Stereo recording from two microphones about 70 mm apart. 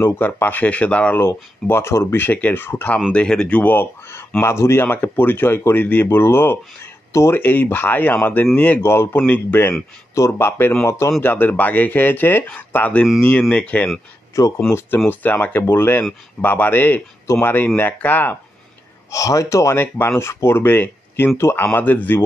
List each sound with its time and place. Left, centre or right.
0.0 s speech: left
1.1 s speech: left
2.2 s speech: left
3.1 s speech: centre; by 7.3 s left
7.3 s speech: left
8.8 s speech: left
10.1 s a man's voice: left
11.2 s speech: left
14.3 s a man's voice: left
14.7 s speech: left
15.0 s speech: left
19.0 s a man's voice: left
21.4 s speech: left
21.7 s speech: left